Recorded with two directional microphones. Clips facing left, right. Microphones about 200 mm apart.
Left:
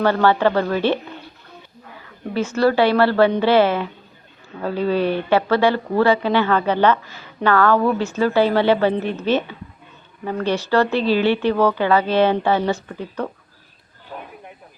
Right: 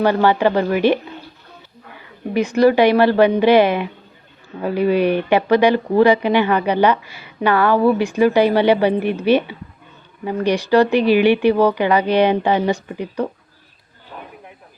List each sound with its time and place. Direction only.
0.0 s speech: 15° right (ahead or behind)
2.3 s speech: 15° right (ahead or behind)